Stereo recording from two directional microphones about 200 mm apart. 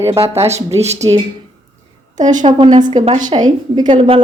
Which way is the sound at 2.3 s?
25° right (ahead or behind).